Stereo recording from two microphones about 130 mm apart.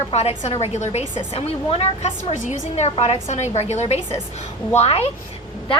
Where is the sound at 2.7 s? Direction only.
55° left (ahead or behind).